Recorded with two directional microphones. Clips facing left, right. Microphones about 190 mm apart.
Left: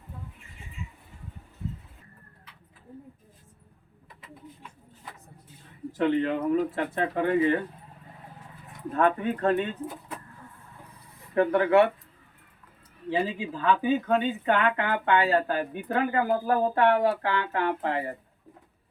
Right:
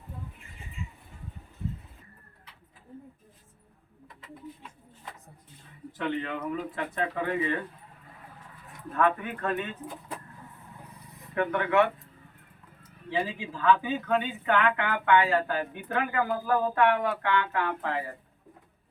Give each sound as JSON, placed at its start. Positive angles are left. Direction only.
{"t": 6.0, "sound": "speech", "side_deg": 35}
{"t": 8.9, "sound": "speech", "side_deg": 35}
{"t": 11.3, "sound": "speech", "side_deg": 35}
{"t": 13.1, "sound": "speech", "side_deg": 30}